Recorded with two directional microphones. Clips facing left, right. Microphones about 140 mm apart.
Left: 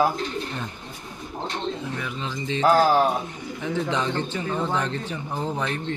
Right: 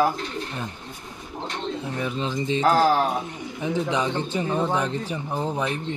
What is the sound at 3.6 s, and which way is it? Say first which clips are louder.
Speech: right 1 dB; 15° right (ahead or behind).